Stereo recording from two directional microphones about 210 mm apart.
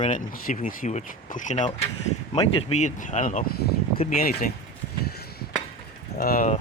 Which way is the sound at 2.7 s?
35° left (ahead or behind).